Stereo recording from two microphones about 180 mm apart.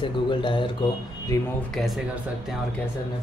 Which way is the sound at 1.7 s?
Centre (ahead or behind).